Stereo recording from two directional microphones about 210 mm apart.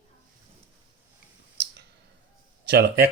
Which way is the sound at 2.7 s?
55° right (ahead or behind).